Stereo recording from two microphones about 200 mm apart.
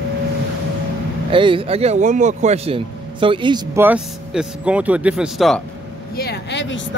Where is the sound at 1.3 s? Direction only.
25° right (ahead or behind).